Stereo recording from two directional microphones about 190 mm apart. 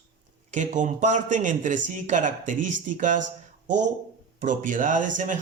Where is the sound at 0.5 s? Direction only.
40° right (ahead or behind).